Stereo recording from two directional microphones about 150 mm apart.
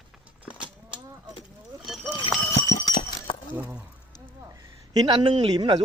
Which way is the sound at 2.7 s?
55° left (ahead or behind).